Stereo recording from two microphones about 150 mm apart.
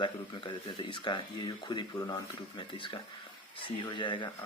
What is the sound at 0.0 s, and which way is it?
Speech, 35° left (ahead or behind).